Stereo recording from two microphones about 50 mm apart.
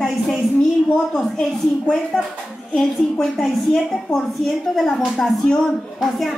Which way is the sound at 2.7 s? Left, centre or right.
Centre.